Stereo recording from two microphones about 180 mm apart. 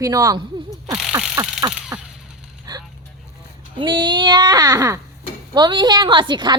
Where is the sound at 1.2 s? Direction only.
5° right (ahead or behind).